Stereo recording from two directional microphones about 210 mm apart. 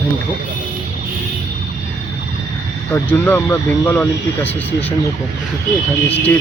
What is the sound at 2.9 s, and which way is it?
Speech, 10° left (ahead or behind).